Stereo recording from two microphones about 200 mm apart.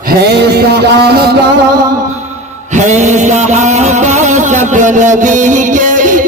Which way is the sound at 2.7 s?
35° right (ahead or behind).